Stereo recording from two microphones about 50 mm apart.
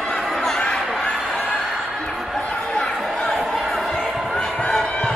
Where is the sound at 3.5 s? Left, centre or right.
Centre.